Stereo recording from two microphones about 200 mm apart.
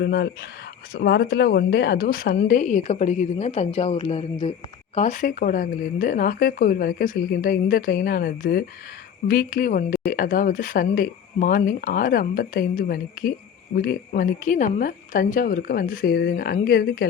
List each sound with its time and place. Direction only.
0.0 s a woman's voice: 55° left (ahead or behind)